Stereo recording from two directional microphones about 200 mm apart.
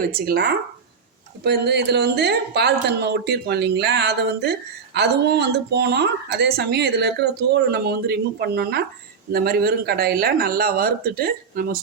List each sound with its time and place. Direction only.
0.1 s a woman's voice: 50° right (ahead or behind)